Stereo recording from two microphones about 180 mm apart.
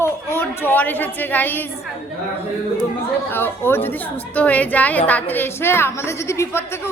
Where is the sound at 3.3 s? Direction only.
10° left (ahead or behind).